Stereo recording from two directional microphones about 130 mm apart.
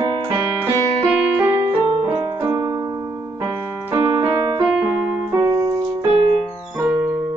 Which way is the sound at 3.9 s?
35° right (ahead or behind).